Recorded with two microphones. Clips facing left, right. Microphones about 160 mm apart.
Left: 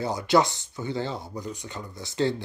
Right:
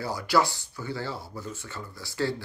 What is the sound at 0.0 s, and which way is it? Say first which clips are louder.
Speech: left 3 dB; 20° left (ahead or behind).